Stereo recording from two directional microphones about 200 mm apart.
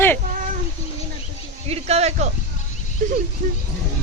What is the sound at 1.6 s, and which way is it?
Speech, 30° right (ahead or behind).